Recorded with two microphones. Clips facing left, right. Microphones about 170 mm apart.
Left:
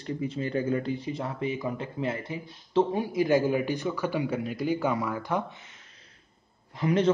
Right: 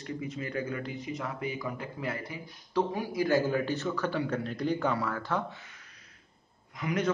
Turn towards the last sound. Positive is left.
turn(degrees=30)  # may be behind; listen again after turning